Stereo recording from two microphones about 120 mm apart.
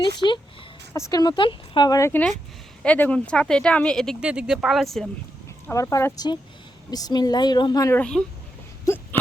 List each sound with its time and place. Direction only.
0.2 s speech: 30° right (ahead or behind)
0.9 s speech: 35° left (ahead or behind)
2.0 s speech: 20° left (ahead or behind)
2.8 s speech: 10° left (ahead or behind)
4.2 s speech: 10° right (ahead or behind)
5.7 s speech: 25° left (ahead or behind)
6.1 s speech: 35° left (ahead or behind)
8.1 s speech: 10° left (ahead or behind)
8.9 s speech: 25° left (ahead or behind)